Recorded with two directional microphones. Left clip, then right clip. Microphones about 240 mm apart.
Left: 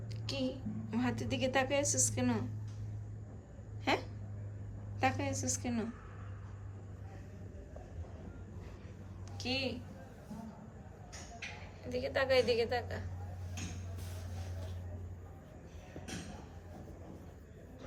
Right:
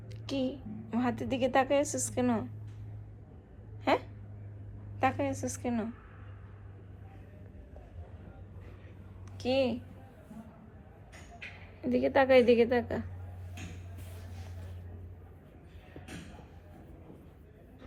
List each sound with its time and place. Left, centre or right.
0.3 s a woman's voice: centre
4.9 s a woman's voice: centre
9.4 s a woman's voice: centre
11.9 s a woman's voice: centre